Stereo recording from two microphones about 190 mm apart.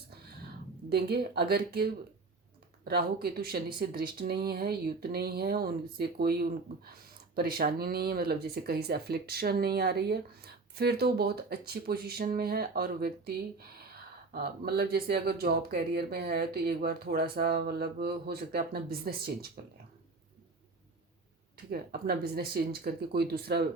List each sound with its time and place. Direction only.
0.9 s speech: 60° right (ahead or behind)
21.7 s speech: 55° right (ahead or behind)